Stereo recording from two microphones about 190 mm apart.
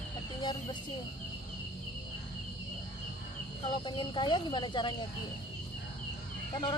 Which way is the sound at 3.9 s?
25° left (ahead or behind).